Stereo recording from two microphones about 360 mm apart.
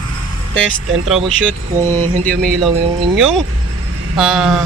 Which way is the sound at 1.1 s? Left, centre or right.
Centre.